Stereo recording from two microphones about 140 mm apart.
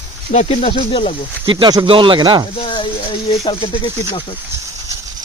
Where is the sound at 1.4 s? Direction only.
35° right (ahead or behind).